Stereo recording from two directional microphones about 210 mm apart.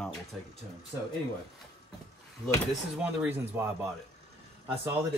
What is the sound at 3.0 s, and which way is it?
Speech, 10° right (ahead or behind).